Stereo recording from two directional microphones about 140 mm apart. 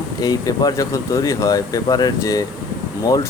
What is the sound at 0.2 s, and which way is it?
Speech, 25° left (ahead or behind).